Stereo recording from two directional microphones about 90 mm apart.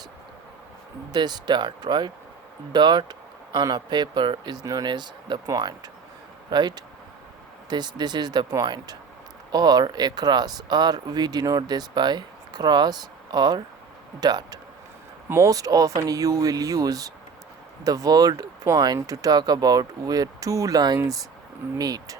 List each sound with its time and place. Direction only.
1.1 s speech: 50° right (ahead or behind)
4.6 s speech: 40° right (ahead or behind)
4.9 s speech: 55° right (ahead or behind)
5.5 s speech: 45° right (ahead or behind)
15.3 s speech: 35° right (ahead or behind)